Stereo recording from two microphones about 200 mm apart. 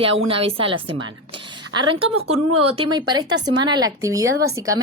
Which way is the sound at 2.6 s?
25° right (ahead or behind).